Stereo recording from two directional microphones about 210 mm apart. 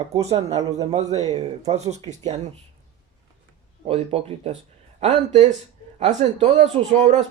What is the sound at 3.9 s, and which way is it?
Speech, 30° right (ahead or behind).